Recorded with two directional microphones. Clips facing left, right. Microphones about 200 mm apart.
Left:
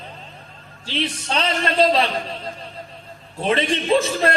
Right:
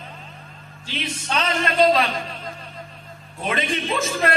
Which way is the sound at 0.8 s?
30° left (ahead or behind).